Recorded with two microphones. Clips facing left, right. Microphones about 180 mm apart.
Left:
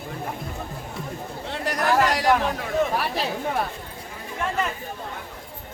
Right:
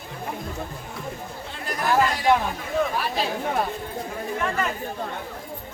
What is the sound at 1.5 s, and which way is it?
Chatter, 75° left (ahead or behind).